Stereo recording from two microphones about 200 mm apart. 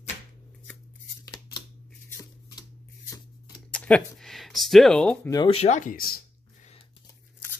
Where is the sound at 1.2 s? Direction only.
20° left (ahead or behind).